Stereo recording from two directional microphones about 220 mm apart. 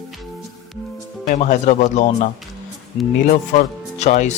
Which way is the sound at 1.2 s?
35° left (ahead or behind).